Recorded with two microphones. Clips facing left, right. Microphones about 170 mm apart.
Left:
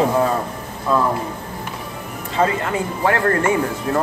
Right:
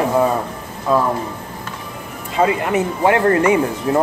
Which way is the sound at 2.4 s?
20° right (ahead or behind).